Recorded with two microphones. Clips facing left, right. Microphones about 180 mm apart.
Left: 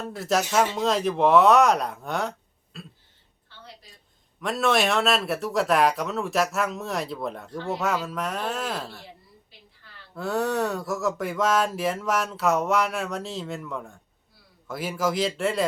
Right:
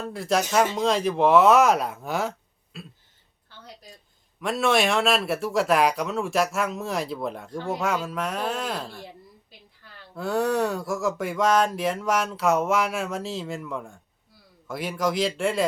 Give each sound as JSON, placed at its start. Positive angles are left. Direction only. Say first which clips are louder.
{"t": 0.0, "sound": "speech", "louder": "even", "side_deg": 0}
{"t": 4.4, "sound": "speech", "louder": "right 1 dB", "side_deg": 0}
{"t": 10.2, "sound": "speech", "louder": "right 2 dB", "side_deg": 0}